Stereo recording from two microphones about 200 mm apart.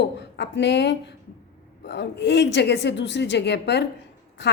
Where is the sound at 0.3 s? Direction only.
60° left (ahead or behind).